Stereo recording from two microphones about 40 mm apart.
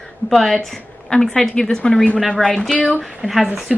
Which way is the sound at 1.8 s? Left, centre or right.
Left.